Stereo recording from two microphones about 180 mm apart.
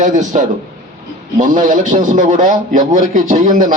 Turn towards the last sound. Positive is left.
turn(degrees=-45)  # may be behind; listen again after turning